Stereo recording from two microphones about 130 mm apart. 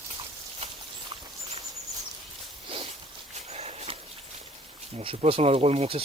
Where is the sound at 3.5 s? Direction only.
55° right (ahead or behind).